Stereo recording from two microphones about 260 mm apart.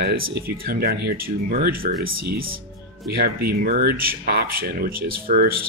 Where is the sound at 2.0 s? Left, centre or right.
Right.